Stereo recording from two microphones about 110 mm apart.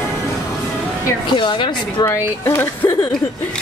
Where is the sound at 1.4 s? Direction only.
45° left (ahead or behind).